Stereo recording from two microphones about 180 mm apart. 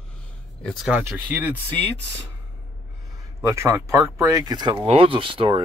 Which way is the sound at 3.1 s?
15° right (ahead or behind).